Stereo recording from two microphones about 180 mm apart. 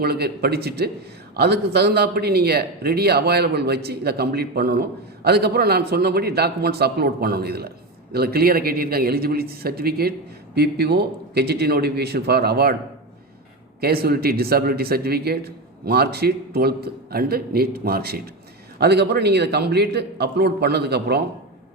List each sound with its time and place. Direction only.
0.0 s a man's voice: 60° right (ahead or behind)
13.8 s a man's voice: 60° right (ahead or behind)